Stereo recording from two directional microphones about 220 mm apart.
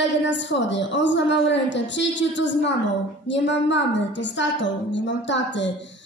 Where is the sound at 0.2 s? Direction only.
55° left (ahead or behind).